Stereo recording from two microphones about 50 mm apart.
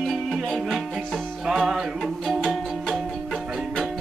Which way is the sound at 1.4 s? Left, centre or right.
Centre.